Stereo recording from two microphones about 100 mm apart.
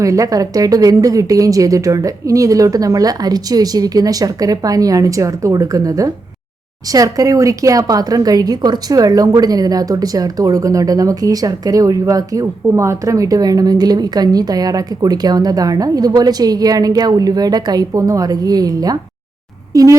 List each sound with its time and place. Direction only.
0.0 s a woman's voice: 35° right (ahead or behind)